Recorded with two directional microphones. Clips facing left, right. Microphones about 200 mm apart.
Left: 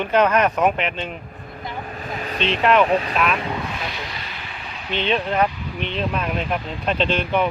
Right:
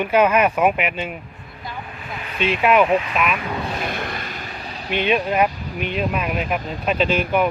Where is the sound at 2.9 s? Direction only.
35° left (ahead or behind).